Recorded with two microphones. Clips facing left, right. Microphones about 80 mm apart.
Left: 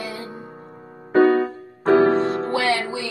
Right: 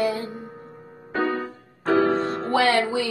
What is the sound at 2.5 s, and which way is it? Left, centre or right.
Music, right.